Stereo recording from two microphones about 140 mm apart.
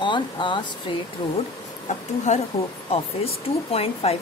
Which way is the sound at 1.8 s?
55° left (ahead or behind).